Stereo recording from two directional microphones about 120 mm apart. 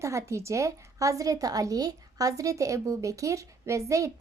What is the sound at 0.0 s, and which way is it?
A woman's voice, 25° right (ahead or behind).